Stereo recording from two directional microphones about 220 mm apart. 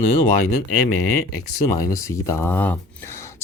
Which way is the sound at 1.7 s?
15° left (ahead or behind).